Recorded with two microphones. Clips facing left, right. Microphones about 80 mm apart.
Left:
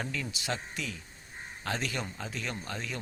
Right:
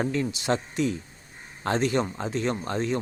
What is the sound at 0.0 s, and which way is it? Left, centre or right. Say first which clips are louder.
Speech: right 9 dB; right.